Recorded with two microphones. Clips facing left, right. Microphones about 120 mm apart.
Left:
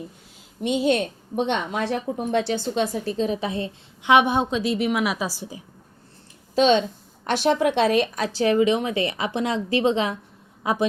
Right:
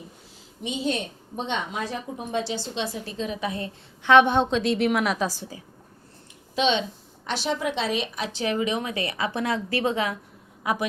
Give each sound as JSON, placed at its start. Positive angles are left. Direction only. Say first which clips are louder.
{"t": 0.6, "sound": "a woman's voice", "louder": "left 7 dB", "side_deg": 60}
{"t": 4.0, "sound": "a woman's voice", "louder": "right 1 dB", "side_deg": 15}
{"t": 6.6, "sound": "speech", "louder": "left 6 dB", "side_deg": 45}
{"t": 7.3, "sound": "a woman's voice", "louder": "left 7 dB", "side_deg": 55}